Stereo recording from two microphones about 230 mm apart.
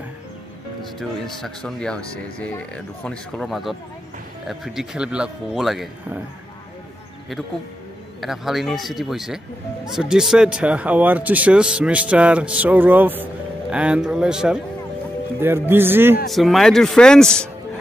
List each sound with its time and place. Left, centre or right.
0.9 s speech: centre
8.2 s speech: centre